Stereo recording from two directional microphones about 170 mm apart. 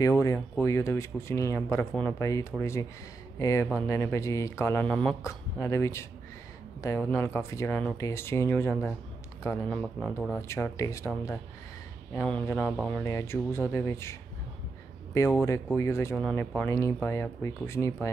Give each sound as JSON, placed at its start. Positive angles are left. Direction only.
{"t": 0.0, "sound": "speech", "side_deg": 20}
{"t": 12.1, "sound": "speech", "side_deg": 10}
{"t": 13.0, "sound": "speech", "side_deg": 15}
{"t": 15.1, "sound": "speech", "side_deg": 15}